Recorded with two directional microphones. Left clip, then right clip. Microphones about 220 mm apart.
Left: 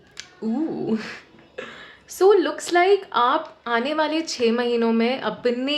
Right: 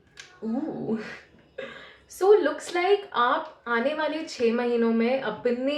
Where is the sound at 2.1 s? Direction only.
45° left (ahead or behind).